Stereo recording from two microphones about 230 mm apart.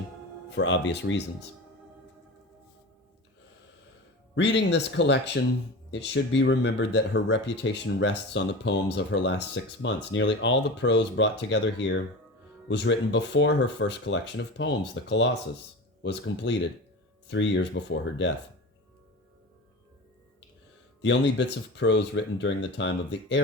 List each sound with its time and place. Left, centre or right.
0.5 s speech: left
4.4 s speech: left
21.0 s speech: left